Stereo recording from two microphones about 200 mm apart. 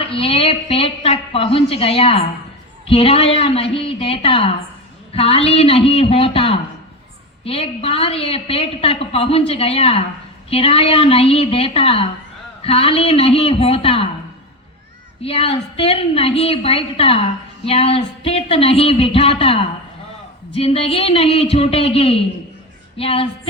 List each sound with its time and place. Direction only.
0.1 s a woman's voice: 30° left (ahead or behind)
15.2 s a woman's voice: 30° left (ahead or behind)